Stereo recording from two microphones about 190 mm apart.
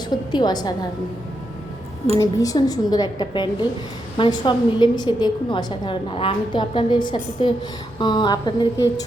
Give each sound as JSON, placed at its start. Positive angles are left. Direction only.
{"t": 0.1, "sound": "a woman's voice", "side_deg": 20}
{"t": 2.1, "sound": "a woman's voice", "side_deg": 20}